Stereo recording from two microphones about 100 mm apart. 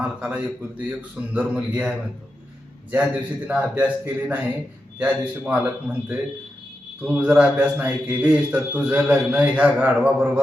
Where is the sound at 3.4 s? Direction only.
15° right (ahead or behind).